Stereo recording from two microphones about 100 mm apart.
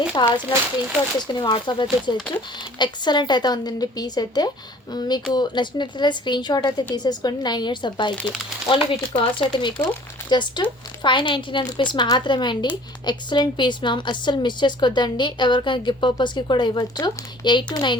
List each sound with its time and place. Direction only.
0.2 s a woman's voice: 45° left (ahead or behind)
8.1 s speech: 10° left (ahead or behind)
8.6 s a woman's voice: 60° left (ahead or behind)